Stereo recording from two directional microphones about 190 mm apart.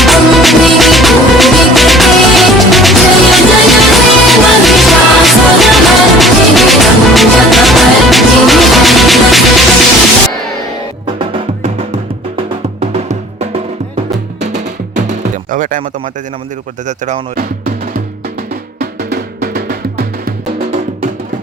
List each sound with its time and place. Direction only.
0.0 s music: centre (ahead or behind)
12.8 s music: 35° right (ahead or behind)
15.0 s music: 45° right (ahead or behind)
17.1 s speech: 50° right (ahead or behind)
18.8 s drum: 55° right (ahead or behind)